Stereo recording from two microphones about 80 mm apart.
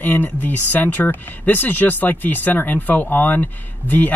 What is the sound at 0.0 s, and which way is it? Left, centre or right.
Speech, left.